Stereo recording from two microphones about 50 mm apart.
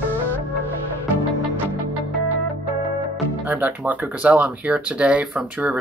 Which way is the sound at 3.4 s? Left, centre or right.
Right.